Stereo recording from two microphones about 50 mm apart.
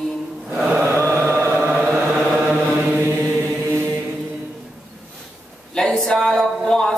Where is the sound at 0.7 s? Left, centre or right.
Right.